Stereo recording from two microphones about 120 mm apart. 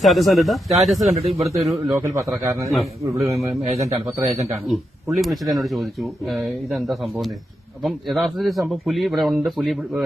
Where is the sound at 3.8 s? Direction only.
55° right (ahead or behind).